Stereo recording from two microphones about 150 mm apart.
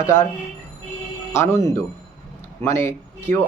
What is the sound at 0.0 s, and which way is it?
Speech, 20° left (ahead or behind).